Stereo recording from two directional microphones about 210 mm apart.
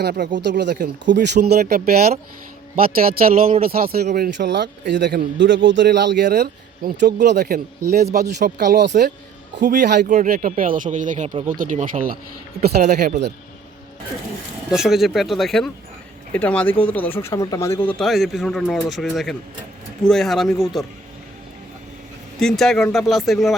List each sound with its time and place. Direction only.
0.0 s speech: 50° right (ahead or behind)
0.4 s speech: 55° right (ahead or behind)
10.1 s speech: 40° right (ahead or behind)
12.6 s speech: 50° right (ahead or behind)
14.7 s speech: centre (ahead or behind)
22.4 s speech: centre (ahead or behind)